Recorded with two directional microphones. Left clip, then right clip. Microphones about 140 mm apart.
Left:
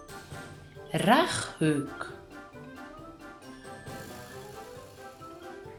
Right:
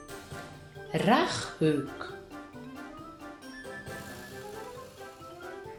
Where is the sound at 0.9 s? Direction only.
50° left (ahead or behind).